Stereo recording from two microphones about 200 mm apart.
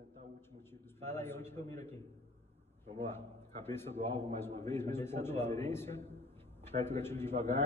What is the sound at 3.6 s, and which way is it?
A man's voice, 10° left (ahead or behind).